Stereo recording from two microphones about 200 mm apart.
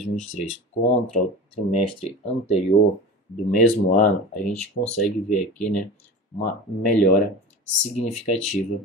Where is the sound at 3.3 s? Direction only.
40° left (ahead or behind).